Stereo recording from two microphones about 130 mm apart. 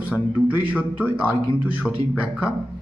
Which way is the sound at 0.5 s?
10° right (ahead or behind).